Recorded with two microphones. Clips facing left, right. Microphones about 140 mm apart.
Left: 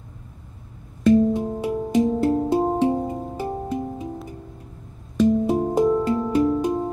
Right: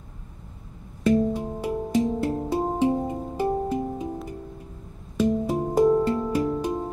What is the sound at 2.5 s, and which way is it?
Music, 25° left (ahead or behind).